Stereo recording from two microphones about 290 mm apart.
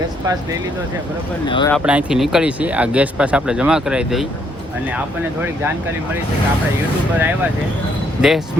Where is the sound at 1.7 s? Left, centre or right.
Centre.